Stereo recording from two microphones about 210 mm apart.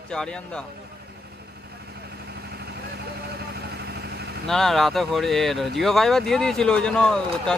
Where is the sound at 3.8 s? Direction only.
50° right (ahead or behind).